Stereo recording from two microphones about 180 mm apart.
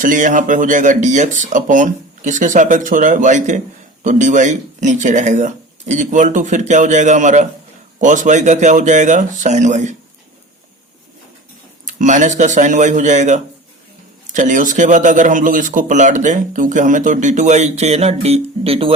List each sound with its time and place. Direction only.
0.0 s a man's voice: 45° right (ahead or behind)
11.9 s a man's voice: 45° right (ahead or behind)